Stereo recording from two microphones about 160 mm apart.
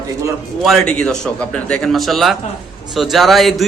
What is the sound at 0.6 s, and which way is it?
A man's voice, centre (ahead or behind).